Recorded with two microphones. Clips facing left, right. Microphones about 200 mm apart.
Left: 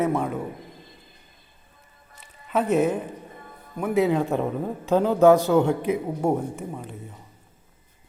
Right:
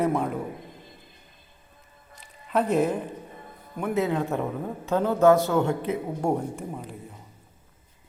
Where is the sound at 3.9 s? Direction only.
15° left (ahead or behind).